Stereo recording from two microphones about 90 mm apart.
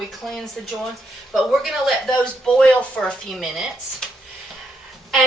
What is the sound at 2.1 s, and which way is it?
A woman's voice, 10° left (ahead or behind).